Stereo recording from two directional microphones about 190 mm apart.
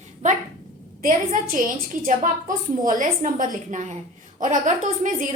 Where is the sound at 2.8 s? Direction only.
45° right (ahead or behind).